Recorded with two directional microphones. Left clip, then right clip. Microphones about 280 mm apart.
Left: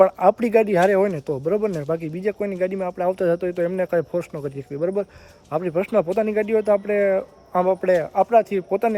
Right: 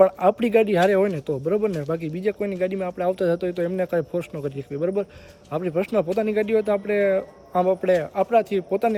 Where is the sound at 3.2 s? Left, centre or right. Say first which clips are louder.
Left 2 dB; left.